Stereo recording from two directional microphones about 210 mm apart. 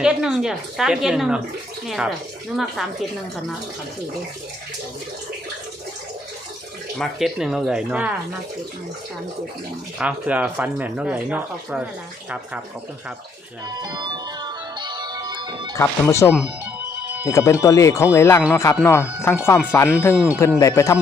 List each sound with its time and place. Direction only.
0.0 s a woman's voice: centre (ahead or behind)
7.0 s a woman's voice: centre (ahead or behind)
10.0 s speech: 5° right (ahead or behind)
13.7 s music: 15° right (ahead or behind)
15.7 s speech: 15° left (ahead or behind)